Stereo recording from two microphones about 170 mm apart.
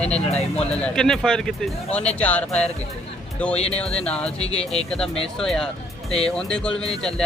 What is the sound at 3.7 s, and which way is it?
Speech, 5° left (ahead or behind).